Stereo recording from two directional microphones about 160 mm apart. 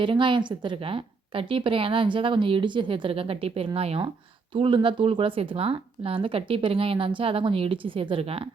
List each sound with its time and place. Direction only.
0.0 s a woman's voice: 30° right (ahead or behind)